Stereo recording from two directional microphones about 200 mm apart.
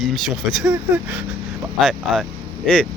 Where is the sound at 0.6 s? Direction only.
10° right (ahead or behind).